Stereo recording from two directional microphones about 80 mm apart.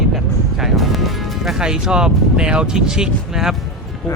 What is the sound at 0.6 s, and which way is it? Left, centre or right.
Speech, centre.